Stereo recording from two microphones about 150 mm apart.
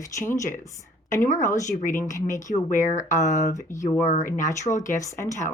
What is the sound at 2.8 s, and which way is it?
Speech, 55° left (ahead or behind).